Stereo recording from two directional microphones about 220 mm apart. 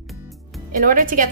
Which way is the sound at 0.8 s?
40° right (ahead or behind).